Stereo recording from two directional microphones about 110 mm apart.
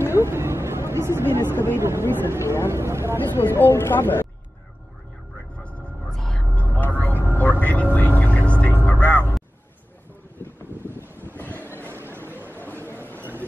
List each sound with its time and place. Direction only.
0.1 s speech: 20° right (ahead or behind)
3.3 s speech: 20° left (ahead or behind)
5.6 s a sound: 10° left (ahead or behind)
6.6 s vehicle: 15° left (ahead or behind)
7.6 s a sound: 15° left (ahead or behind)
9.0 s music: 20° left (ahead or behind)
10.8 s wind noise: 20° right (ahead or behind)
11.1 s vehicle: 20° left (ahead or behind)
12.8 s a sound: 20° left (ahead or behind)